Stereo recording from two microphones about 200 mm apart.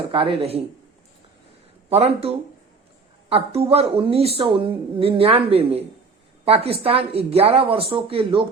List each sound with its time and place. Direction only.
0.1 s a woman's voice: 25° right (ahead or behind)
1.9 s a woman's voice: 30° right (ahead or behind)